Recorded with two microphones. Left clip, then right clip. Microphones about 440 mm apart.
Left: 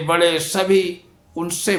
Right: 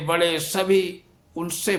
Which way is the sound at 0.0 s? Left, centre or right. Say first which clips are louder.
Left 5 dB; right.